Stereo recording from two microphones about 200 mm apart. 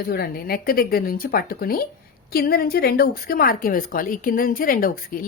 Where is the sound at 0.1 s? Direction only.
50° left (ahead or behind).